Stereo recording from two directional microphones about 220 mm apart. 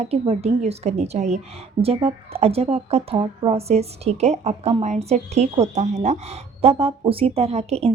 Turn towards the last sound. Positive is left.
turn(degrees=-30)  # may be behind; listen again after turning